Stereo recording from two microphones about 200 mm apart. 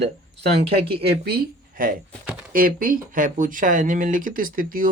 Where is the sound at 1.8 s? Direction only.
45° right (ahead or behind).